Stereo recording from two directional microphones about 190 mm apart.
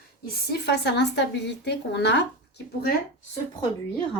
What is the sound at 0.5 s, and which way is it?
Speech, 60° left (ahead or behind).